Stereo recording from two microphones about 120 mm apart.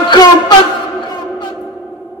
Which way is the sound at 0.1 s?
35° left (ahead or behind).